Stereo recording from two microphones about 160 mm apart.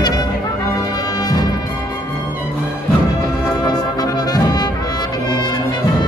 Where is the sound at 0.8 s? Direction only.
20° left (ahead or behind).